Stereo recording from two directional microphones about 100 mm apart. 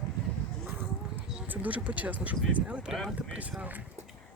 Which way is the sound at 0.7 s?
25° right (ahead or behind).